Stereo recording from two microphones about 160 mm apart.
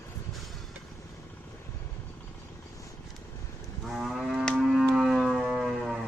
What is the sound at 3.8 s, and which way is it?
Music, centre (ahead or behind).